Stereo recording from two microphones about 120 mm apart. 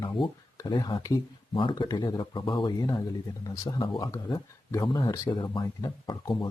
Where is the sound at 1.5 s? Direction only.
45° left (ahead or behind).